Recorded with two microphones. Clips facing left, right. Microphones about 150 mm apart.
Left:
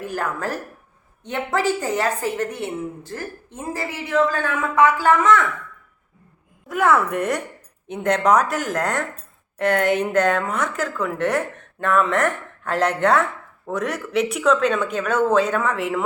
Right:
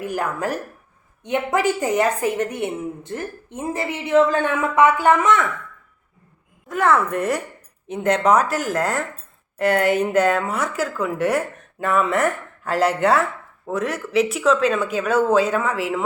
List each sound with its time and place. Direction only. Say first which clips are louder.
0.0 s a woman's voice: right 2 dB; 15° right (ahead or behind)
6.7 s a woman's voice: even; centre (ahead or behind)